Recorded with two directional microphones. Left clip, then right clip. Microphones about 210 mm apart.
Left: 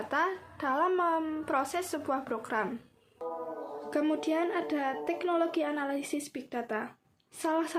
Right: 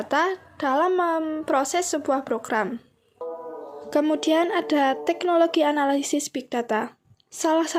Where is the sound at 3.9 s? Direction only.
30° right (ahead or behind).